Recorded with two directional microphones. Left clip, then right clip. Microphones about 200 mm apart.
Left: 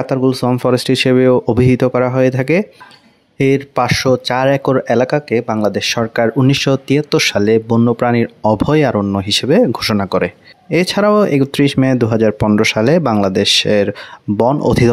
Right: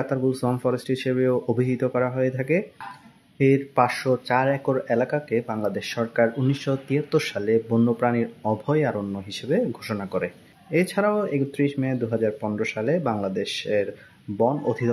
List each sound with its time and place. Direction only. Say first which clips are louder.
0.0 s speech: left 9 dB; 45° left (ahead or behind)